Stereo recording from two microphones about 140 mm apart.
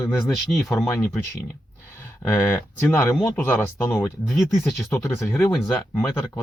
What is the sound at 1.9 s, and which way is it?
Speech, 15° left (ahead or behind).